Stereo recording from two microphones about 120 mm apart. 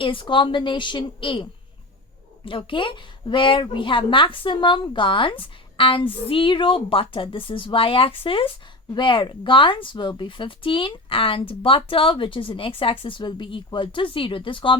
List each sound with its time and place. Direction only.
0.0 s a woman's voice: 45° left (ahead or behind)